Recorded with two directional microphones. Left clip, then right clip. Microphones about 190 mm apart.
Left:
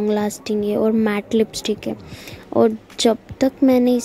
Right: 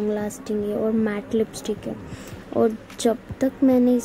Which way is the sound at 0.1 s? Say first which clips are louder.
Left 5 dB; 35° left (ahead or behind).